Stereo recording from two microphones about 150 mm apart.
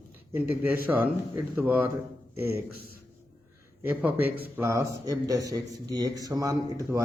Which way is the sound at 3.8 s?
10° right (ahead or behind).